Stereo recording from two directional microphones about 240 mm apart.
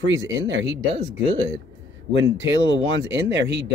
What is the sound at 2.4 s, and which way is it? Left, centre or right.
A man's voice, right.